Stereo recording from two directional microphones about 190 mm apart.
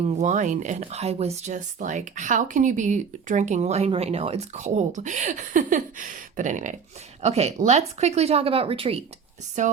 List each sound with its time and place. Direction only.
0.0 s speech: 40° right (ahead or behind)
9.6 s speech: 40° right (ahead or behind)